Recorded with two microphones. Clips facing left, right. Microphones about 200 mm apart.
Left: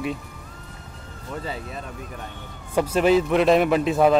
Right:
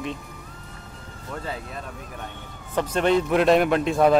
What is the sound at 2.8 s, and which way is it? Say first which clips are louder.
Speech: left 3 dB; 5° left (ahead or behind).